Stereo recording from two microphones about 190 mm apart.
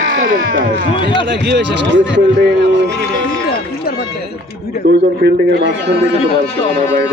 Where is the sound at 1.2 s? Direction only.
65° right (ahead or behind).